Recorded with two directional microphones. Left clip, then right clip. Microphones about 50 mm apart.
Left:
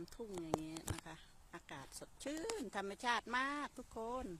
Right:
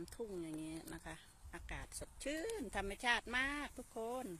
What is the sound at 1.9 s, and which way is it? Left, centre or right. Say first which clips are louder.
Speech: right 3 dB; left.